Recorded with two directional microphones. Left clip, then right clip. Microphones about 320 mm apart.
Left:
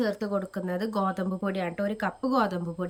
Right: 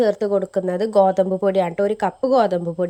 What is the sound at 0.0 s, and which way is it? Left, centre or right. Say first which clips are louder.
Speech: right 11 dB; centre.